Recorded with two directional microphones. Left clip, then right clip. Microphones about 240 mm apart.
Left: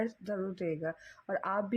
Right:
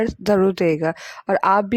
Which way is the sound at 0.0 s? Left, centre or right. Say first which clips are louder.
Right 18 dB; right.